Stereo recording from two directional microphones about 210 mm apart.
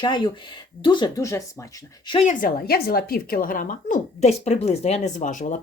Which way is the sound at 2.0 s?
25° left (ahead or behind).